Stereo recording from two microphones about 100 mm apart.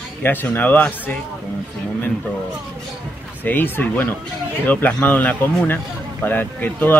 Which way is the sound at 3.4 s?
20° left (ahead or behind).